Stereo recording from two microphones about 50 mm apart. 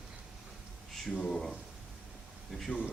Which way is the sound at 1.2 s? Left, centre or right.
Centre.